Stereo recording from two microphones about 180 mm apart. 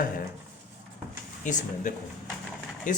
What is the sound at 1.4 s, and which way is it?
Speech, 45° left (ahead or behind).